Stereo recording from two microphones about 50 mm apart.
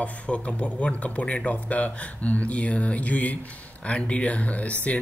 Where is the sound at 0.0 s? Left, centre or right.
Left.